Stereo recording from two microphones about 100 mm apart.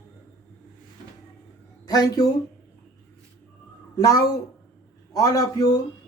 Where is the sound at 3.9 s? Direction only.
35° left (ahead or behind).